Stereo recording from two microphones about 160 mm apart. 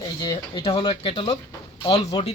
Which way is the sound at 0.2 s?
25° left (ahead or behind).